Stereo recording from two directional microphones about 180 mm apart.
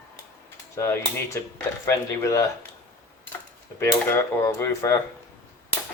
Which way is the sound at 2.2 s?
15° left (ahead or behind).